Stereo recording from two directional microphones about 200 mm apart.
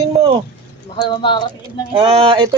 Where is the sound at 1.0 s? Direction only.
20° left (ahead or behind).